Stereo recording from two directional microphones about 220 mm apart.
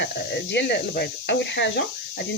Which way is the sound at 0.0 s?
50° left (ahead or behind).